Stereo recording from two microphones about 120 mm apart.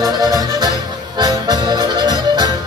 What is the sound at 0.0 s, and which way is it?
Music, 30° right (ahead or behind).